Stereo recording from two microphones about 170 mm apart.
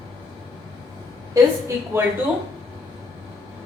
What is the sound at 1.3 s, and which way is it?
Speech, 15° right (ahead or behind).